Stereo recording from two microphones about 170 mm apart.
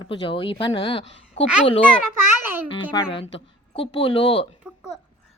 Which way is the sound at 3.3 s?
35° left (ahead or behind).